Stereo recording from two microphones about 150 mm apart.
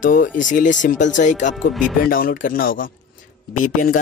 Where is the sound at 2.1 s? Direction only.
70° left (ahead or behind).